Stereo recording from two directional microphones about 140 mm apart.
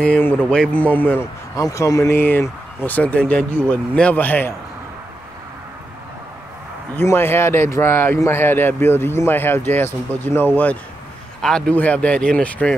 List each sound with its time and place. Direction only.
0.0 s speech: 10° left (ahead or behind)
1.6 s speech: 25° left (ahead or behind)
7.0 s speech: 15° left (ahead or behind)